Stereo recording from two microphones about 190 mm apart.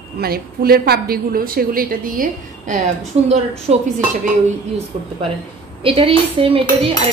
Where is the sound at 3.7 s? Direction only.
30° right (ahead or behind).